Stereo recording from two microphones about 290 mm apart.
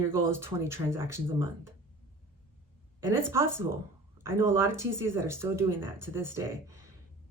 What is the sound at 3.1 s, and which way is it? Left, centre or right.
Speech, centre.